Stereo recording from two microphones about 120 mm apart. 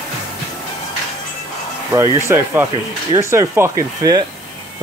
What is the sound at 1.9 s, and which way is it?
Speech, 20° right (ahead or behind).